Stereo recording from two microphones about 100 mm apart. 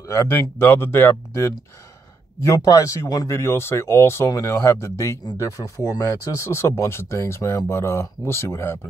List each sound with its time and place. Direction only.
0.0 s speech: 30° left (ahead or behind)